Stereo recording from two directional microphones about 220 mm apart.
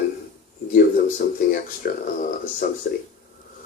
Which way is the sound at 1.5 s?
40° left (ahead or behind).